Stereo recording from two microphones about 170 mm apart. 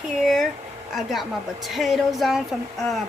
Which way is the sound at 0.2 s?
Centre (ahead or behind).